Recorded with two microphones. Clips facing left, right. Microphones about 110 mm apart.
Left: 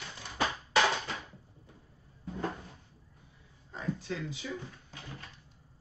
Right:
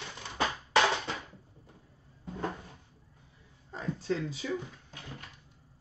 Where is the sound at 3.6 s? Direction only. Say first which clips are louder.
Right 3 dB; 35° right (ahead or behind).